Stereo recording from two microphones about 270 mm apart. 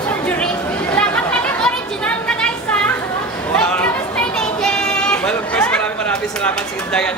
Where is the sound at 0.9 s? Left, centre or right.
Centre.